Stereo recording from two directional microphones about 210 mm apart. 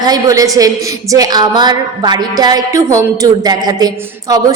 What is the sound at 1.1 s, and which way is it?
Music, 20° right (ahead or behind).